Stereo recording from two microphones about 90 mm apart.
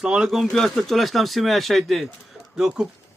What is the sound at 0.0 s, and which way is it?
A man's voice, 5° right (ahead or behind).